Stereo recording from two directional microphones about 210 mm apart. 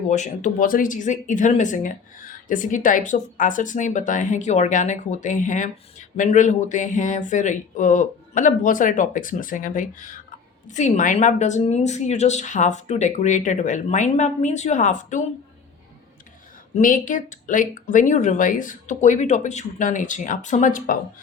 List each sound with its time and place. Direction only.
0.1 s speech: 35° left (ahead or behind)
16.7 s speech: 40° left (ahead or behind)